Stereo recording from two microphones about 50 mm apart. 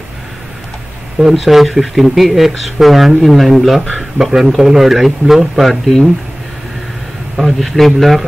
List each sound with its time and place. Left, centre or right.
1.4 s a man's voice: centre
7.3 s speech: centre